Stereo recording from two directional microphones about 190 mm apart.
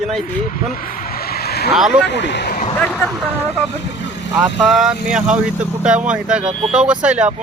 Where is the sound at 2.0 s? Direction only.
65° left (ahead or behind).